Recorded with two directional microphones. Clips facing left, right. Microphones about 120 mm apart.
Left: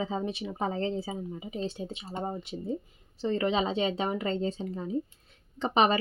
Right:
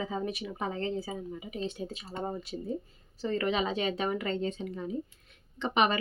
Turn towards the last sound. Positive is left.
turn(degrees=30)  # may be behind; listen again after turning